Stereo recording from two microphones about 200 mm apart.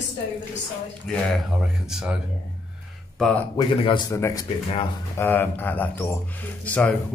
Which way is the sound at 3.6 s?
25° left (ahead or behind).